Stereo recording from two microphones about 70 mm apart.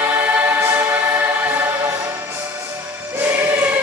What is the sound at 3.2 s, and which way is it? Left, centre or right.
Music, right.